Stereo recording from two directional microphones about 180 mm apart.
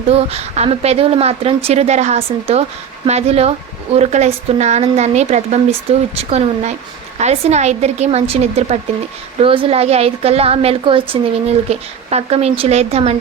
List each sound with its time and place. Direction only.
0.1 s a woman's voice: 35° right (ahead or behind)